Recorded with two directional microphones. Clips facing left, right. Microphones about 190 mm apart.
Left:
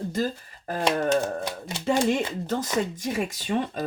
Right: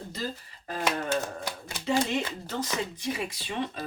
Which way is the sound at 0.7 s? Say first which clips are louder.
Left 6 dB; 45° left (ahead or behind).